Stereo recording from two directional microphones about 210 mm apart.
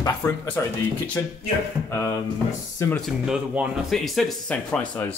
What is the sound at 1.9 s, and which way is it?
Speech, 15° left (ahead or behind).